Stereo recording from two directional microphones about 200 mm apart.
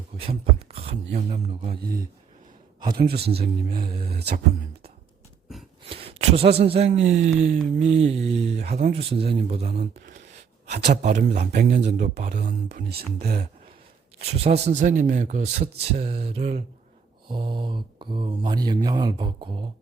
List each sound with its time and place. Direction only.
0.3 s a sound: 30° right (ahead or behind)
1.1 s speech: 30° right (ahead or behind)
2.9 s speech: 50° right (ahead or behind)
5.9 s a sound: 30° right (ahead or behind)
6.6 s speech: 30° right (ahead or behind)
10.9 s speech: 35° right (ahead or behind)
13.1 s speech: 35° right (ahead or behind)